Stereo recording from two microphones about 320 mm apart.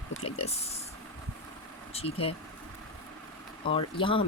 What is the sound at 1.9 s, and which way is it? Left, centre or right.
Speech, centre.